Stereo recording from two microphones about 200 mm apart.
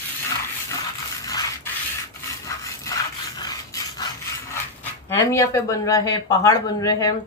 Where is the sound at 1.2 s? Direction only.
20° left (ahead or behind).